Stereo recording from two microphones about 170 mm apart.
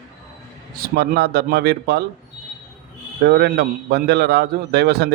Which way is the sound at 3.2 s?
70° right (ahead or behind).